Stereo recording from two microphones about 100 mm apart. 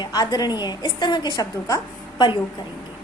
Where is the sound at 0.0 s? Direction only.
40° left (ahead or behind).